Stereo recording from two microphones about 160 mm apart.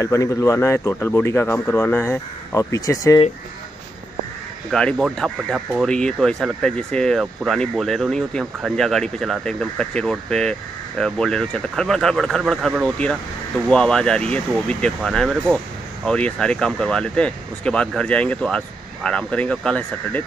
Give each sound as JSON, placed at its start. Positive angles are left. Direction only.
{"t": 0.0, "sound": "speech", "side_deg": 20}
{"t": 4.6, "sound": "speech", "side_deg": 5}